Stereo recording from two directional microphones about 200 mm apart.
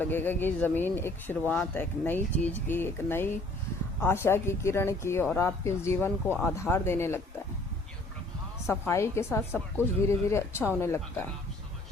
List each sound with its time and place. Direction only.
0.0 s speech: 10° left (ahead or behind)
8.9 s speech: 15° left (ahead or behind)